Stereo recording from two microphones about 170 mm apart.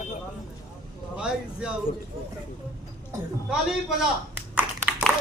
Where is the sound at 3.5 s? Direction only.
5° right (ahead or behind).